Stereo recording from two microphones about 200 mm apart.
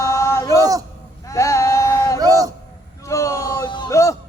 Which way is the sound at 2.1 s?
15° right (ahead or behind).